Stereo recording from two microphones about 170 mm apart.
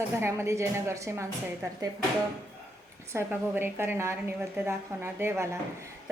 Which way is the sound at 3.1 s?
15° right (ahead or behind).